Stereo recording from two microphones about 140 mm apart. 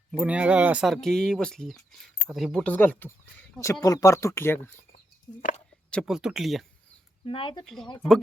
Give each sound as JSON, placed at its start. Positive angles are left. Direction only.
{"t": 0.2, "sound": "speech", "side_deg": -10}
{"t": 3.6, "sound": "speech", "side_deg": 25}
{"t": 5.9, "sound": "speech", "side_deg": 0}
{"t": 7.3, "sound": "speech", "side_deg": 35}